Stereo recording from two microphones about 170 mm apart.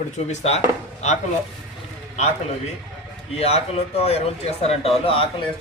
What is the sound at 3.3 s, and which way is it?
Speech, 35° left (ahead or behind).